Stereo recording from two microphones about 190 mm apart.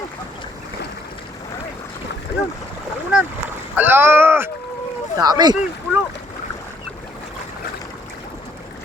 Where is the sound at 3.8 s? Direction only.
10° right (ahead or behind).